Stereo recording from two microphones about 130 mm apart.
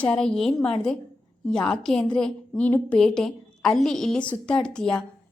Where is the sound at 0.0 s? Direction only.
5° left (ahead or behind).